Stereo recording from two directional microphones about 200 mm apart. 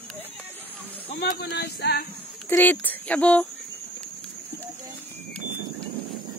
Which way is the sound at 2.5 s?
10° left (ahead or behind).